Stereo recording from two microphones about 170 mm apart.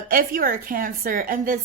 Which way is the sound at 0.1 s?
55° right (ahead or behind).